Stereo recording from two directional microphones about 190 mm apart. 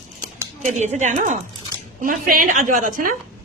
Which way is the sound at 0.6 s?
40° right (ahead or behind).